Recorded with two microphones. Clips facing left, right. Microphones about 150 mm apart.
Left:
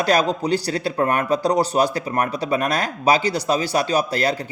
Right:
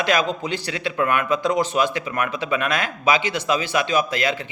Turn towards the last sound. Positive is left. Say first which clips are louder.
# left 1 dB
turn(degrees=40)  # may be behind; listen again after turning